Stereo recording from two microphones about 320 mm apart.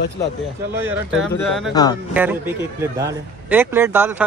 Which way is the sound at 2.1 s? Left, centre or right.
Centre.